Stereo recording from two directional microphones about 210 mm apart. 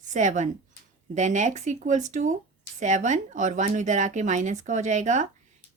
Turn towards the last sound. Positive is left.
turn(degrees=-35)  # may be behind; listen again after turning